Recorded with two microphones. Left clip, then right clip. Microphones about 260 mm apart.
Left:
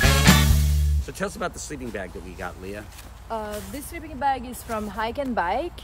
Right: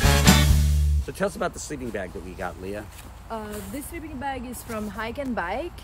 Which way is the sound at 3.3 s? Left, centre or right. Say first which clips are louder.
Left 3 dB; centre.